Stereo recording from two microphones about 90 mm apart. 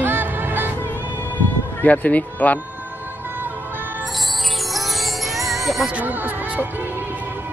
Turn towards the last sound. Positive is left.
turn(degrees=0)  # may be behind; listen again after turning